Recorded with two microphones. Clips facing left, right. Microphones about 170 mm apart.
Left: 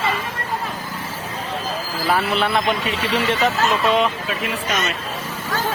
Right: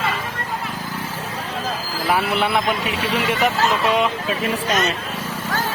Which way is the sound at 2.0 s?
15° right (ahead or behind).